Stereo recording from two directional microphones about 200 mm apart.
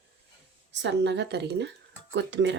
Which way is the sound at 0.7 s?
60° right (ahead or behind).